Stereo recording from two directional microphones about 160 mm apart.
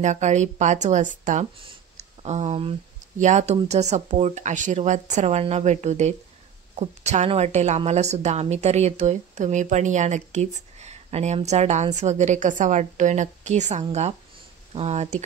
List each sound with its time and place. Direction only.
0.0 s a woman's voice: 50° right (ahead or behind)
1.6 s a sound: 40° right (ahead or behind)
3.2 s a woman's voice: 45° right (ahead or behind)